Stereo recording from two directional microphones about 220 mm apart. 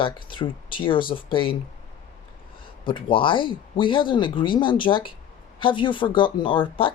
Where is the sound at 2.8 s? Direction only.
25° left (ahead or behind).